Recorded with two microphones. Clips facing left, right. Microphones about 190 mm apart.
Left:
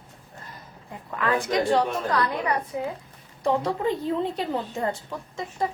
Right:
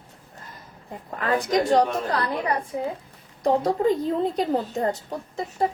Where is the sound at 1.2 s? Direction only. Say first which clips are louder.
Right 2 dB; 40° right (ahead or behind).